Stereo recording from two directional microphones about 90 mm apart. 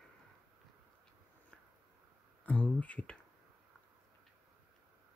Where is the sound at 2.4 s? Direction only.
15° left (ahead or behind).